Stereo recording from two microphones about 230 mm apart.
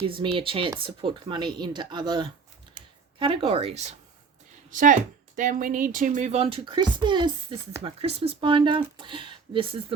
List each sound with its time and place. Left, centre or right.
0.0 s speech: right